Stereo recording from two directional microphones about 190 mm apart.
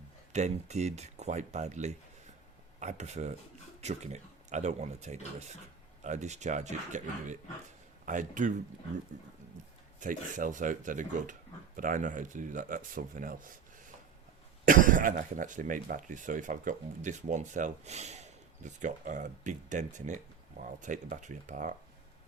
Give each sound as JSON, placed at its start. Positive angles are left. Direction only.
{"t": 0.3, "sound": "speech", "side_deg": -35}
{"t": 10.0, "sound": "speech", "side_deg": -45}
{"t": 14.6, "sound": "speech", "side_deg": -45}